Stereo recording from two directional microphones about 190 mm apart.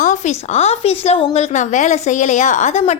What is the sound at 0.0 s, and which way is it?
A woman's voice, 40° left (ahead or behind).